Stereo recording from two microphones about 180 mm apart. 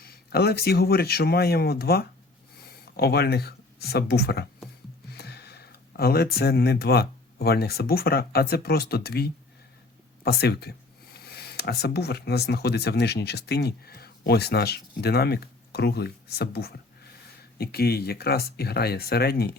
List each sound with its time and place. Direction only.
0.0 s speech: 60° left (ahead or behind)